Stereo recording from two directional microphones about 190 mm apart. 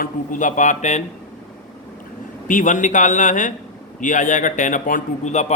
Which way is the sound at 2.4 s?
40° left (ahead or behind).